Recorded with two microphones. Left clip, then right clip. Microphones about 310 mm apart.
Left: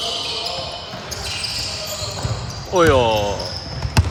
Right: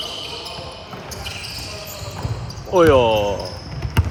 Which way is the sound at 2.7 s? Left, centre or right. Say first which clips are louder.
Right 1 dB; centre.